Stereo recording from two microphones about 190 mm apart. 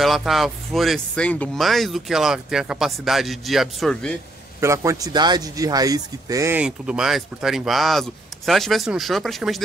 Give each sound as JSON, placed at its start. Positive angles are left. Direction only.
{"t": 0.0, "sound": "a man's voice", "side_deg": 0}
{"t": 4.6, "sound": "a man's voice", "side_deg": -15}